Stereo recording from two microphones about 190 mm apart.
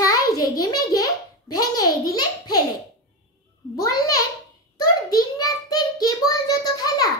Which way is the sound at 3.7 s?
15° left (ahead or behind).